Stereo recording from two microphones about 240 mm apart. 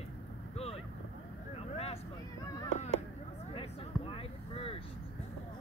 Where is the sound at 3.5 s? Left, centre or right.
Left.